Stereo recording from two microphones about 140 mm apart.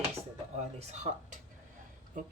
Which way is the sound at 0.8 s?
55° right (ahead or behind).